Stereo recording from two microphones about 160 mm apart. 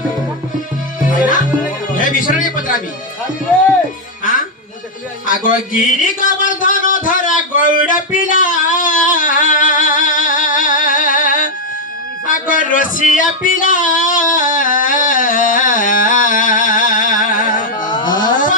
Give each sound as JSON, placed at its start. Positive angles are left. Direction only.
{"t": 1.1, "sound": "music", "side_deg": 55}
{"t": 2.0, "sound": "a man's voice", "side_deg": 55}
{"t": 5.2, "sound": "music", "side_deg": 55}
{"t": 12.3, "sound": "speech", "side_deg": 55}
{"t": 17.8, "sound": "a sound", "side_deg": 25}
{"t": 18.3, "sound": "a sound", "side_deg": 55}